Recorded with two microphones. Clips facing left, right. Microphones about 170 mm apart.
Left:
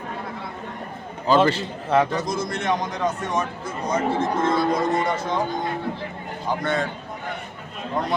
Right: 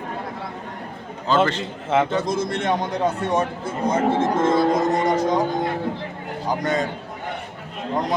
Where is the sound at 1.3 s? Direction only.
10° left (ahead or behind).